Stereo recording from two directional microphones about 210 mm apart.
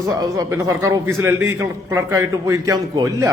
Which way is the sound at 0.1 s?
15° right (ahead or behind).